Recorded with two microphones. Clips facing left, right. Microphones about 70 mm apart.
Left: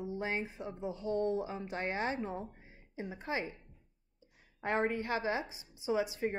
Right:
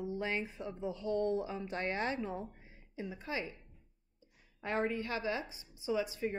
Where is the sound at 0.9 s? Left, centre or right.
Left.